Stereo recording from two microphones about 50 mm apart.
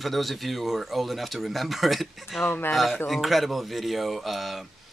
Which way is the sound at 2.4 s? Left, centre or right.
Left.